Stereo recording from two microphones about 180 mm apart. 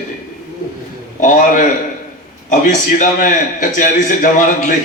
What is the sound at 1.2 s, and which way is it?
A man's voice, 45° left (ahead or behind).